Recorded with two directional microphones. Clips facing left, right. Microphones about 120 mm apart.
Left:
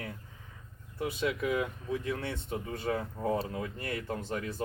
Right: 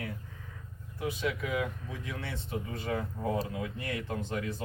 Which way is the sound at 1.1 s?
45° left (ahead or behind).